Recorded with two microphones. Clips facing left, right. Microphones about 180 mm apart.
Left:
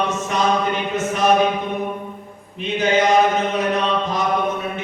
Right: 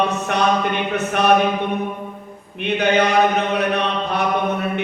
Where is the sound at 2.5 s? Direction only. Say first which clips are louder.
Right 1 dB; 65° right (ahead or behind).